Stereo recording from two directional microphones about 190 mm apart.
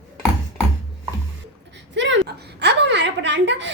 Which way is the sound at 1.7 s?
70° right (ahead or behind).